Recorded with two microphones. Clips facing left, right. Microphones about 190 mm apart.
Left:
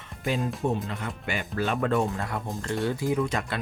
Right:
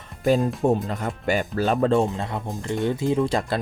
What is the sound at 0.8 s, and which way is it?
Speech, 40° right (ahead or behind).